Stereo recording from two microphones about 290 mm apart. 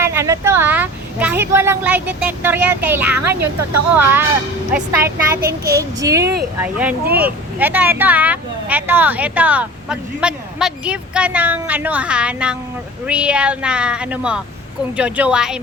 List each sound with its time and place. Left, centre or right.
0.0 s speech: centre
3.4 s a woman's voice: right
3.9 s child singing: centre
5.4 s child singing: right
5.7 s child singing: centre
6.6 s speech: centre